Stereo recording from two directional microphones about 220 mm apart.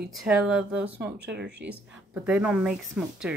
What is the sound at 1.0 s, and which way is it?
Speech, 50° right (ahead or behind).